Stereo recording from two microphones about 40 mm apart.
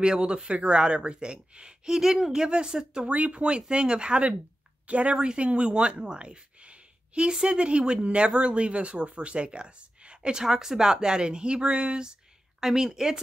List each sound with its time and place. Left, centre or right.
0.0 s speech: right
1.9 s speech: centre
3.1 s speech: right
5.1 s speech: right